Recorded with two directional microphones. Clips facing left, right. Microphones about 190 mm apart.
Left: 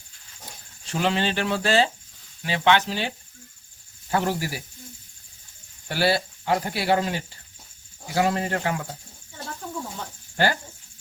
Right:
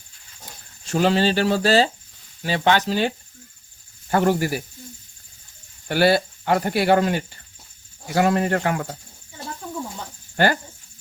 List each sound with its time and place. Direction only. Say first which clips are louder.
0.9 s speech: right 6 dB; 40° right (ahead or behind)
4.1 s speech: right 6 dB; 55° right (ahead or behind)
5.9 s speech: right 5 dB; 55° right (ahead or behind)
10.3 s speech: right 4 dB; 55° right (ahead or behind)